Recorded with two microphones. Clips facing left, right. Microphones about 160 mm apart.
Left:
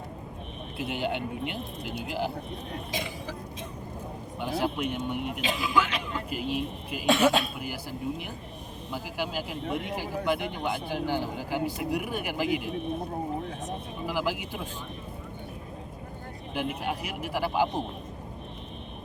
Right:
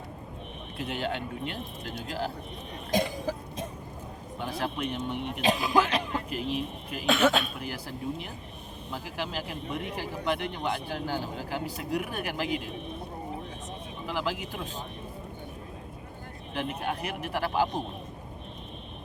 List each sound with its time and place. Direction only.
0.8 s speech: 10° left (ahead or behind)
2.9 s cough: 45° right (ahead or behind)
4.4 s speech: 10° left (ahead or behind)
5.4 s speech: 40° right (ahead or behind)
6.3 s speech: 5° left (ahead or behind)
13.7 s vehicle: 10° left (ahead or behind)
16.6 s speech: 5° left (ahead or behind)